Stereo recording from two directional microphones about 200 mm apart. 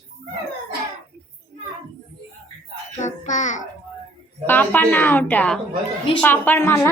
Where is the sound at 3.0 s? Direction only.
35° left (ahead or behind).